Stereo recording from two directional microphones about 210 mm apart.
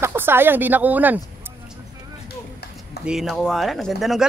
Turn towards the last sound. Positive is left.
turn(degrees=0)  # may be behind; listen again after turning